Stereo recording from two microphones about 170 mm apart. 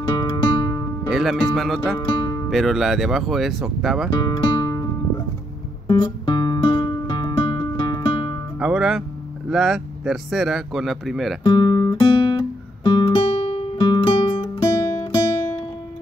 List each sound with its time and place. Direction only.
0.1 s music: 25° left (ahead or behind)
1.1 s speech: centre (ahead or behind)
2.0 s music: 25° left (ahead or behind)
2.5 s speech: centre (ahead or behind)
4.1 s music: 25° left (ahead or behind)
5.9 s music: 25° left (ahead or behind)
8.5 s music: 5° right (ahead or behind)
9.5 s speech: centre (ahead or behind)
11.4 s guitar: 25° left (ahead or behind)
14.6 s music: 20° left (ahead or behind)